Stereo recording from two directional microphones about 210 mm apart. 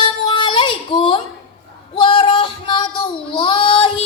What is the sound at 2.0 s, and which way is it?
Child singing, 20° left (ahead or behind).